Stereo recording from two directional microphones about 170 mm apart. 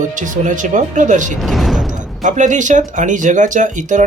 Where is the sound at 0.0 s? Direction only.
50° right (ahead or behind).